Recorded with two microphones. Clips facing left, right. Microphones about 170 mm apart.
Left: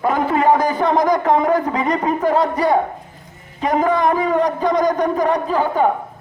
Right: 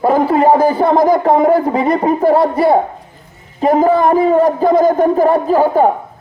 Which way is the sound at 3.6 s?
35° right (ahead or behind).